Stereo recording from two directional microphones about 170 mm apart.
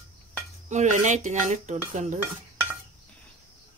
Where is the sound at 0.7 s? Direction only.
45° right (ahead or behind).